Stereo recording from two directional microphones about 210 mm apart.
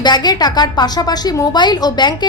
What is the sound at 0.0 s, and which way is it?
A woman's voice, 20° left (ahead or behind).